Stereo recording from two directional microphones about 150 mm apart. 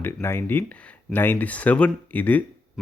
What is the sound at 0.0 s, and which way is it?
Speech, 15° left (ahead or behind).